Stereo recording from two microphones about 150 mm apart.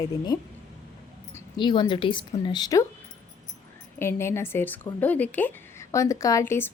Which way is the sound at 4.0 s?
15° left (ahead or behind).